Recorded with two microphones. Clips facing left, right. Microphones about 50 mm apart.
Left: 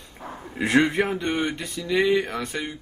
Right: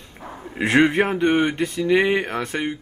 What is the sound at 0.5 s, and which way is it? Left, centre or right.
Speech, right.